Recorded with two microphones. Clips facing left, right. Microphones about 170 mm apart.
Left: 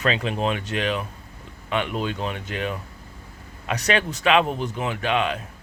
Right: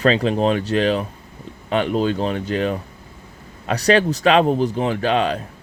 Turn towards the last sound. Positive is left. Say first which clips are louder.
# right 5 dB
turn(degrees=-35)  # may be behind; listen again after turning